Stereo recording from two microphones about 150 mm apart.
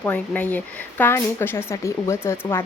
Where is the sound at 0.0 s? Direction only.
10° left (ahead or behind).